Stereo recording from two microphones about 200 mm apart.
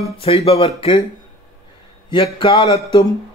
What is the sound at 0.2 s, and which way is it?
Speech, 30° left (ahead or behind).